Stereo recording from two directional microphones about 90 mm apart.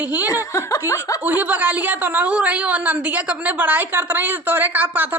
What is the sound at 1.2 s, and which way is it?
A woman's voice, 20° right (ahead or behind).